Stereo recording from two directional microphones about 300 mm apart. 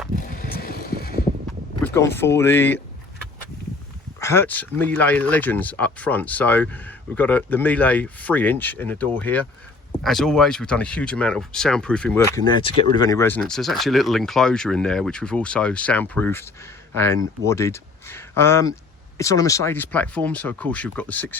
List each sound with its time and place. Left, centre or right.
0.2 s vehicle: left
1.8 s speech: centre
4.2 s speech: centre